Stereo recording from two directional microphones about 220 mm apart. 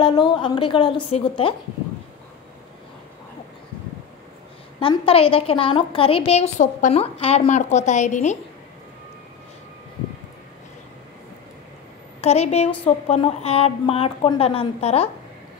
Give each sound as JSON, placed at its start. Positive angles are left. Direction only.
{"t": 0.0, "sound": "a woman's voice", "side_deg": 20}
{"t": 4.7, "sound": "a woman's voice", "side_deg": 25}
{"t": 12.2, "sound": "a woman's voice", "side_deg": 30}